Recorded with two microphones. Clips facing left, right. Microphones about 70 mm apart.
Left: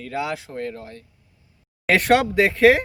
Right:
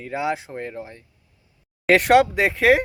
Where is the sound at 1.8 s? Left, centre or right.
Centre.